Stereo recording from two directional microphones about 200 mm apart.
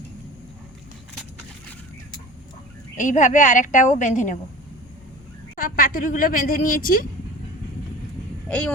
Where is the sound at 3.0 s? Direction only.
40° left (ahead or behind).